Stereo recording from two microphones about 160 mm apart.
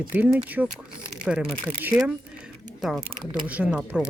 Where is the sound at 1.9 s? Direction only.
25° right (ahead or behind).